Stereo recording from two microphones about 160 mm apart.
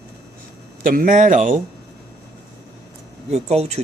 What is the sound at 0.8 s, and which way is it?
Speech, 60° right (ahead or behind).